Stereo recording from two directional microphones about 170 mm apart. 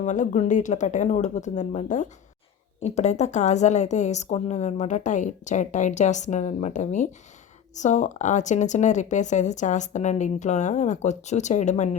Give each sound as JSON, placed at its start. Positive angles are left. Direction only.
{"t": 0.0, "sound": "a woman's voice", "side_deg": 45}